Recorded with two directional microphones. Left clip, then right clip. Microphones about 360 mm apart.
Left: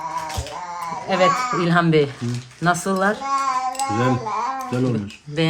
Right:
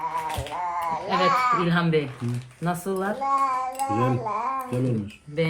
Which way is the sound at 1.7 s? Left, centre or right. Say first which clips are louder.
Left 7 dB; left.